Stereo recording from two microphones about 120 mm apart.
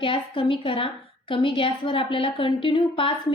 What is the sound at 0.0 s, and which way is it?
A woman's voice, 45° left (ahead or behind).